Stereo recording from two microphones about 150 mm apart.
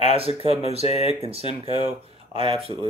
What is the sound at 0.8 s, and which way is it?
Speech, 45° left (ahead or behind).